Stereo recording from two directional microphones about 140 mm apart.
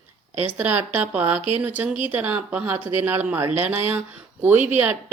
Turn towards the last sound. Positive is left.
turn(degrees=-10)  # may be behind; listen again after turning